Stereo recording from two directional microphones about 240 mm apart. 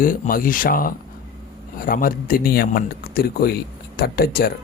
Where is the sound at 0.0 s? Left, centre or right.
Left.